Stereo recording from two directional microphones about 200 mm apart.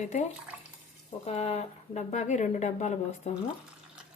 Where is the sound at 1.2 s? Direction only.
30° left (ahead or behind).